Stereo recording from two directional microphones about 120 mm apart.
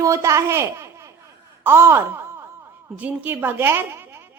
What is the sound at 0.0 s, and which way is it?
A woman's voice, 25° right (ahead or behind).